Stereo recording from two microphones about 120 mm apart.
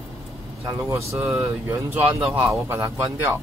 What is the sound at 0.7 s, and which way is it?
Speech, 20° right (ahead or behind).